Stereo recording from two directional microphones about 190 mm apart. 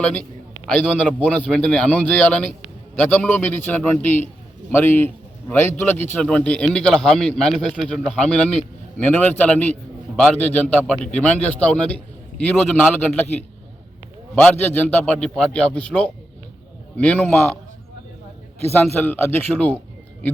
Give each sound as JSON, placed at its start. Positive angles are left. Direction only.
{"t": 0.0, "sound": "a man's voice", "side_deg": 5}
{"t": 14.3, "sound": "a man's voice", "side_deg": 10}
{"t": 18.8, "sound": "a man's voice", "side_deg": 10}